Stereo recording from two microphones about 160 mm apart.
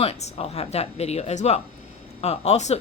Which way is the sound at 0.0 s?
40° left (ahead or behind).